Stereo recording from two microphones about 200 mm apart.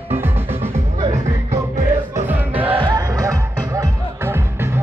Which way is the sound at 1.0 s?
35° right (ahead or behind).